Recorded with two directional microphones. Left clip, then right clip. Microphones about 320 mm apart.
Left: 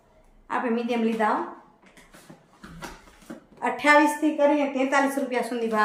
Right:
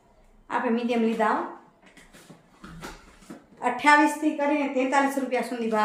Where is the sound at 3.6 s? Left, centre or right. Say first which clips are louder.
Even; centre.